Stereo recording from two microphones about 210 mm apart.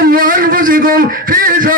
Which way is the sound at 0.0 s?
40° right (ahead or behind).